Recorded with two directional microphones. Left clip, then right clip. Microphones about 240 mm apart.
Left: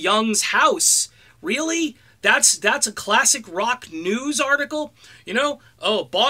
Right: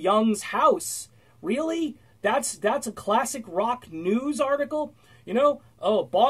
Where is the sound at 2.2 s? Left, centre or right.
Centre.